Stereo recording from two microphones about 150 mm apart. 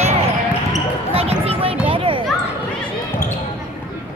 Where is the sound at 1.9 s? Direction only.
35° right (ahead or behind).